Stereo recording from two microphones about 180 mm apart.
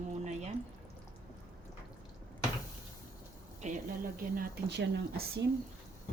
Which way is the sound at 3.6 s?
40° right (ahead or behind).